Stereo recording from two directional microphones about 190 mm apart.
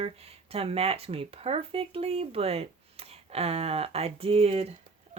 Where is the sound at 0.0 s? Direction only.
30° right (ahead or behind).